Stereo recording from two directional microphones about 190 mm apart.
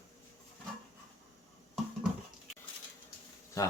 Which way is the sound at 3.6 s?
20° left (ahead or behind).